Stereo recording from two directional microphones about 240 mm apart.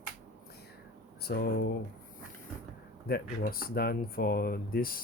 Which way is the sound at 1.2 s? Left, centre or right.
Left.